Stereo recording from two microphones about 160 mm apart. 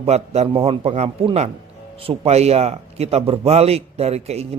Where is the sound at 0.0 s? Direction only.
40° right (ahead or behind).